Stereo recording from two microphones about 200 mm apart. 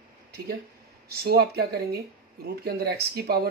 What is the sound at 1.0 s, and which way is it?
Speech, 50° right (ahead or behind).